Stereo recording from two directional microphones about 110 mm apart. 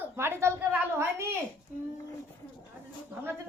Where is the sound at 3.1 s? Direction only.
20° right (ahead or behind).